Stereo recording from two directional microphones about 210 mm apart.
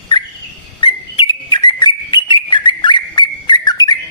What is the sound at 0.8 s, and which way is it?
Bird, 20° left (ahead or behind).